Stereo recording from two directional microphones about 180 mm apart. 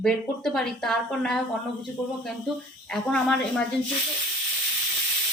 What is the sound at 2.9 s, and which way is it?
Speech, 5° left (ahead or behind).